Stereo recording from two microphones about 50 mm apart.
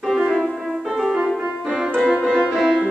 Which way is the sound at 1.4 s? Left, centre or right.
Right.